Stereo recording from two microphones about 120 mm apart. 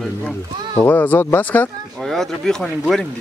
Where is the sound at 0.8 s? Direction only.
15° left (ahead or behind).